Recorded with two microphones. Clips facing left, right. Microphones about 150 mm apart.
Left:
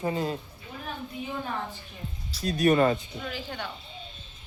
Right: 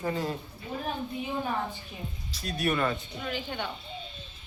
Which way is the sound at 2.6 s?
35° left (ahead or behind).